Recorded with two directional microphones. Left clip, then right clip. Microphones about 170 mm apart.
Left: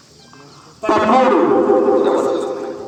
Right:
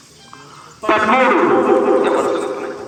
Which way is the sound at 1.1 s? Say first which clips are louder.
Left 1 dB; 30° left (ahead or behind).